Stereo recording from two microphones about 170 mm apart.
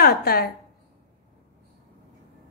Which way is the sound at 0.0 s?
65° left (ahead or behind).